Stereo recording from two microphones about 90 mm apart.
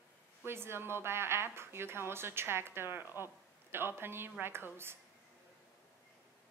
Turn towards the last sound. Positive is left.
turn(degrees=-25)  # may be behind; listen again after turning